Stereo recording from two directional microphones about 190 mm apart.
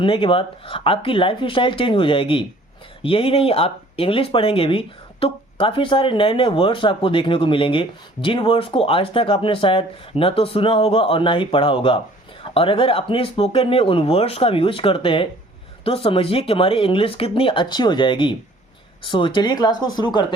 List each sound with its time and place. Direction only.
0.0 s speech: 25° left (ahead or behind)